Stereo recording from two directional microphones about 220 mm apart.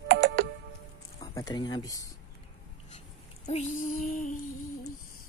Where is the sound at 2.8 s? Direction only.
30° left (ahead or behind).